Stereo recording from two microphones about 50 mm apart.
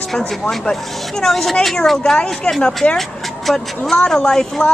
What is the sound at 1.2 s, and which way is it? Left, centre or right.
Speech, centre.